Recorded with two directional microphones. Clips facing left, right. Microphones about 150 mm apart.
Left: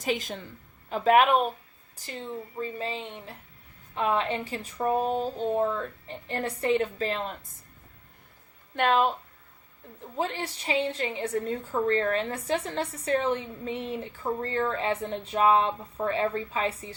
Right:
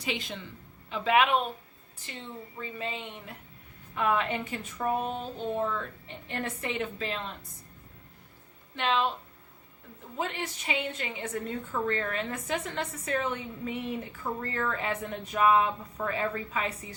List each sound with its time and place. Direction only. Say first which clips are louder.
0.0 s a woman's voice: left 5 dB; 45° left (ahead or behind)
8.7 s speech: left 5 dB; 50° left (ahead or behind)
10.2 s a woman's voice: left 3 dB; 35° left (ahead or behind)